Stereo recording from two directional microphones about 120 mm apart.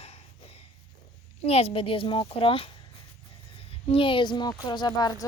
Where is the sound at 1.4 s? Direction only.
55° left (ahead or behind).